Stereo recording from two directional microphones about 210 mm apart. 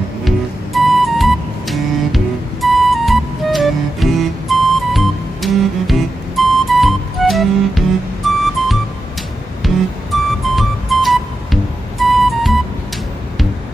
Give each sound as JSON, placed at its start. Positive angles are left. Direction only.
{"t": 0.7, "sound": "music", "side_deg": 0}